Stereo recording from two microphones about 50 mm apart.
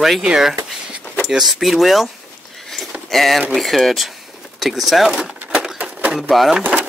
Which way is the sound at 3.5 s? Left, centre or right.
Centre.